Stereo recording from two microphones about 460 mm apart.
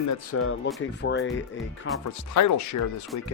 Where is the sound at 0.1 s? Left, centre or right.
Left.